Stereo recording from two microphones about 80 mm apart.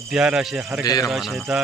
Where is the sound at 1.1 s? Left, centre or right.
Centre.